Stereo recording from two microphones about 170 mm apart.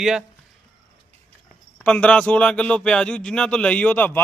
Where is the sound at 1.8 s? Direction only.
5° left (ahead or behind).